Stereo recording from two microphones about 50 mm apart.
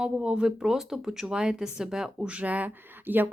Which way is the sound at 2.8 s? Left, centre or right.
Right.